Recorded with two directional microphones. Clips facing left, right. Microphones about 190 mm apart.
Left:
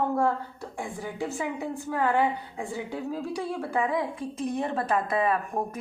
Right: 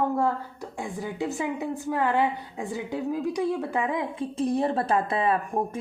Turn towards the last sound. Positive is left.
turn(degrees=-25)  # may be behind; listen again after turning